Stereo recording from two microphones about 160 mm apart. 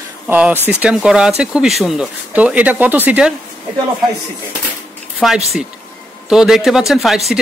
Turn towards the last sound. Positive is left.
turn(degrees=0)  # may be behind; listen again after turning